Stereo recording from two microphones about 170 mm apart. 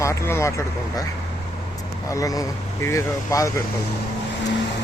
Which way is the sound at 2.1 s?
20° left (ahead or behind).